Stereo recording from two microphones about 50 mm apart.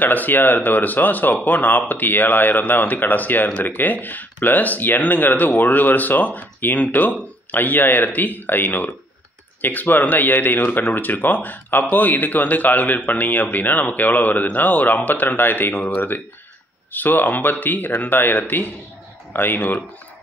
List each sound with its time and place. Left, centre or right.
0.0 s speech: left